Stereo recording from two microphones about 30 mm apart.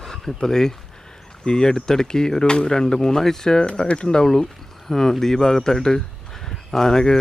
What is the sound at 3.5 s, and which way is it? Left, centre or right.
Speech, left.